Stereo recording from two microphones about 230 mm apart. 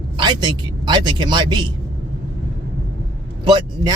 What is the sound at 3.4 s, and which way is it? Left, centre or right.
Speech, centre.